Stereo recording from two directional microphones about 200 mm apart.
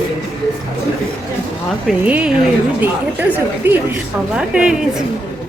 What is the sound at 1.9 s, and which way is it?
Speech, 5° right (ahead or behind).